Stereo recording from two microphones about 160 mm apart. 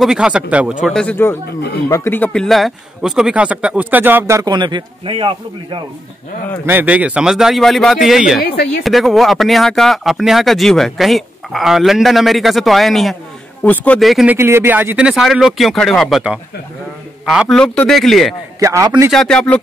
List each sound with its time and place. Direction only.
0.0 s speech: 5° right (ahead or behind); by 5.8 s 30° right (ahead or behind)
6.6 s speech: 10° right (ahead or behind)
8.4 s speech: 70° left (ahead or behind)
8.8 s speech: centre (ahead or behind)
14.3 s speech: 15° right (ahead or behind)
18.6 s a man's voice: 20° right (ahead or behind)
19.0 s speech: 5° left (ahead or behind)